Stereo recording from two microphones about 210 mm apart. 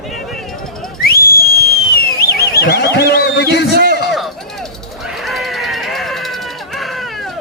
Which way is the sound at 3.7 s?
45° right (ahead or behind).